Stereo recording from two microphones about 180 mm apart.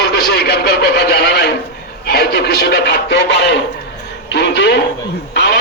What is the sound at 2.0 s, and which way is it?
Music, 60° left (ahead or behind).